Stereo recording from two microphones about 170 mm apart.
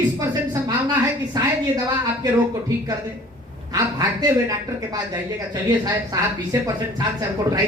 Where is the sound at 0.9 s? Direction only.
25° right (ahead or behind).